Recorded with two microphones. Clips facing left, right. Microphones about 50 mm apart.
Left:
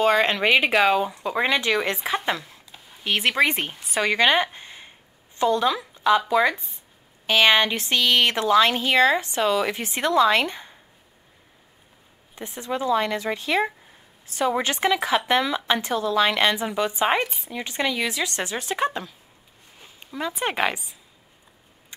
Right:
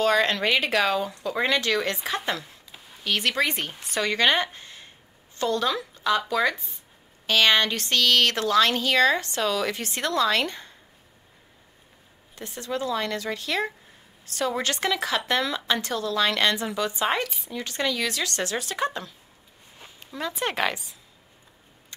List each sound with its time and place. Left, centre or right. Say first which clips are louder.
0.0 s speech: left 2 dB; centre
3.0 s speech: left 4 dB; centre
12.4 s speech: left 2 dB; centre
20.2 s speech: left 2 dB; centre